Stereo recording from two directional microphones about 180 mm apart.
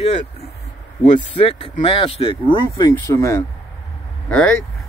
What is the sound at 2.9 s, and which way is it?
Speech, 15° left (ahead or behind).